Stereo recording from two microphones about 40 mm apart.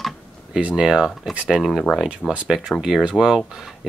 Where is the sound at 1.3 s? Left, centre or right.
Centre.